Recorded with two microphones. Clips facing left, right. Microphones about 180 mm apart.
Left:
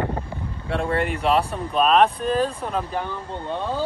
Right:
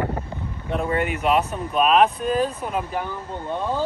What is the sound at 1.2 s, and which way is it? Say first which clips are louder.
Speech: even; 35° left (ahead or behind).